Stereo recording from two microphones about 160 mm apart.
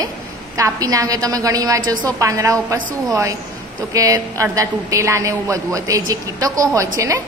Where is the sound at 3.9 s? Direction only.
20° right (ahead or behind).